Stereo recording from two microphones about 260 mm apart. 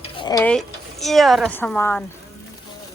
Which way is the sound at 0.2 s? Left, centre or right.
Centre.